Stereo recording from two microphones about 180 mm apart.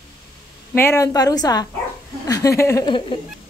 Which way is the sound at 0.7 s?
15° left (ahead or behind).